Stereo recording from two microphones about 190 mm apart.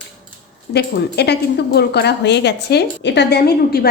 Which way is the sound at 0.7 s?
60° left (ahead or behind).